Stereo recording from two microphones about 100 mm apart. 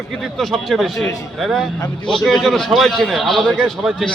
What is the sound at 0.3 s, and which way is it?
A man's voice, centre (ahead or behind).